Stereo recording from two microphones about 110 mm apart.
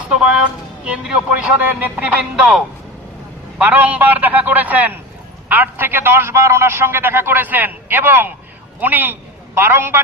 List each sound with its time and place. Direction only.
0.9 s a man's voice: 10° right (ahead or behind)
3.6 s a man's voice: 15° right (ahead or behind)